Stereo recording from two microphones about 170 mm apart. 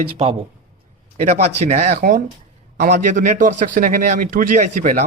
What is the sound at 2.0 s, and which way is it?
A man's voice, 50° right (ahead or behind).